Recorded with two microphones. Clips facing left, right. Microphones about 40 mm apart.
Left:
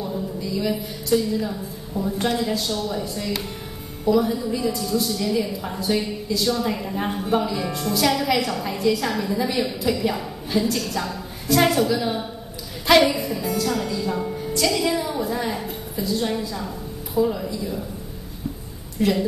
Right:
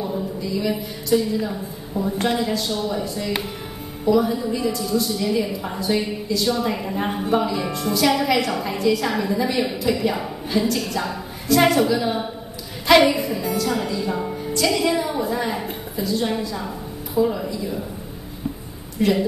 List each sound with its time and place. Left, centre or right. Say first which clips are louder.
0.0 s a woman's voice: right 2 dB; centre
18.9 s a woman's voice: right 2 dB; centre